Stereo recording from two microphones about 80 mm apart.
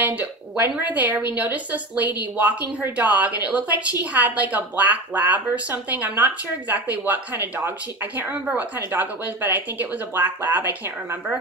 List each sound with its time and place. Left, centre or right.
0.0 s speech: right